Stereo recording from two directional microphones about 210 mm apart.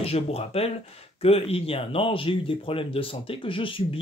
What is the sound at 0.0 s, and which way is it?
Speech, 30° left (ahead or behind).